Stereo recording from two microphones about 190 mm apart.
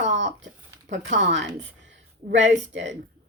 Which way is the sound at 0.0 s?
70° right (ahead or behind).